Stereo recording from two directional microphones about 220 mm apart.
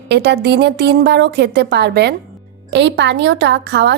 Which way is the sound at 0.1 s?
50° right (ahead or behind).